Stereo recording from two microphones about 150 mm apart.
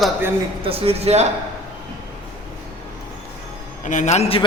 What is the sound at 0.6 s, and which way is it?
Speech, 40° right (ahead or behind).